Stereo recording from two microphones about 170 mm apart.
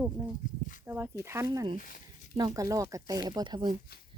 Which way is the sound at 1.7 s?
55° left (ahead or behind).